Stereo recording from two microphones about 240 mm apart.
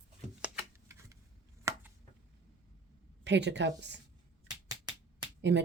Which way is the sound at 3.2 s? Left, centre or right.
Right.